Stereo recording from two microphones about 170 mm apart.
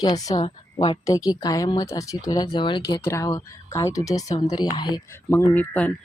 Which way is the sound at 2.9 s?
15° left (ahead or behind).